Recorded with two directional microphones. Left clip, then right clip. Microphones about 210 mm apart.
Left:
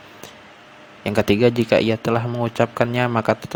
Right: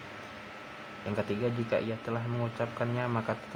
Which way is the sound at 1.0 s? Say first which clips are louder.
Left 16 dB; 50° left (ahead or behind).